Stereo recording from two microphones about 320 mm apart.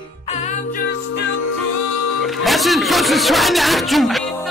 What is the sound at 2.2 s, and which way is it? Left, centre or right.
Music, centre.